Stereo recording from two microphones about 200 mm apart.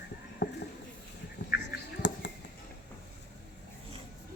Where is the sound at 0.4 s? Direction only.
60° left (ahead or behind).